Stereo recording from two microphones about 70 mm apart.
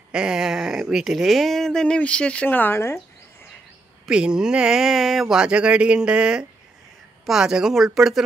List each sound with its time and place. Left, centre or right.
0.1 s speech: centre
2.4 s speech: left
4.1 s speech: centre